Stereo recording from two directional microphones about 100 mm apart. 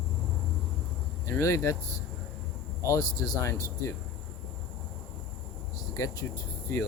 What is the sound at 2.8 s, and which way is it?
Speech, 35° left (ahead or behind).